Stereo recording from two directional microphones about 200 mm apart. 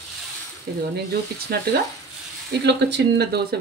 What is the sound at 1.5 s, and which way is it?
Speech, 50° right (ahead or behind).